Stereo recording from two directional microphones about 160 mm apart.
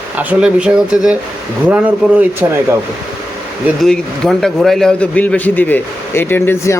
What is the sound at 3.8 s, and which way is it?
A man's voice, 5° left (ahead or behind).